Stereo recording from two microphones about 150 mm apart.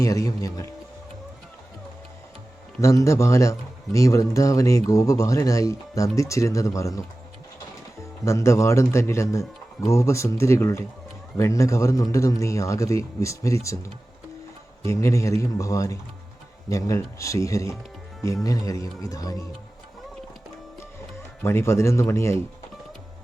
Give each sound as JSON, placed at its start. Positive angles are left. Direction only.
{"t": 0.0, "sound": "a man's voice", "side_deg": 20}
{"t": 2.8, "sound": "a man's voice", "side_deg": 20}
{"t": 8.2, "sound": "a man's voice", "side_deg": 20}
{"t": 14.8, "sound": "a man's voice", "side_deg": 20}
{"t": 21.4, "sound": "speech", "side_deg": 15}